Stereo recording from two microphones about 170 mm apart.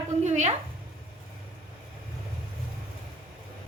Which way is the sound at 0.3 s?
40° right (ahead or behind).